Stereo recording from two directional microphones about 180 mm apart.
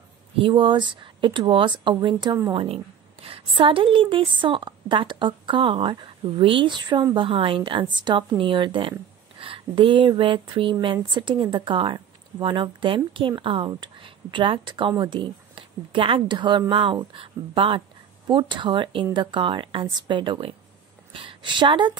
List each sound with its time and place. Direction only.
0.4 s a woman's voice: 25° right (ahead or behind)